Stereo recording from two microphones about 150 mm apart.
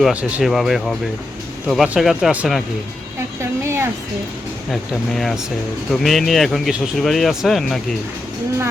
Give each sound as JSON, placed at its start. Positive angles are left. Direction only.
{"t": 0.0, "sound": "speech", "side_deg": -10}
{"t": 3.6, "sound": "a sound", "side_deg": -15}
{"t": 4.7, "sound": "speech", "side_deg": 0}